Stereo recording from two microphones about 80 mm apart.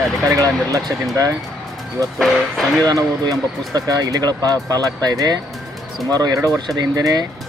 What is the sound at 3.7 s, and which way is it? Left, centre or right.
Speech, right.